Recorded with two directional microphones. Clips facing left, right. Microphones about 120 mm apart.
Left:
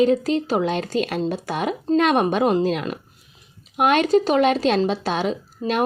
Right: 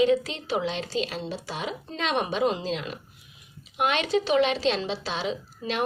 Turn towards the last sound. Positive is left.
turn(degrees=50)  # may be behind; listen again after turning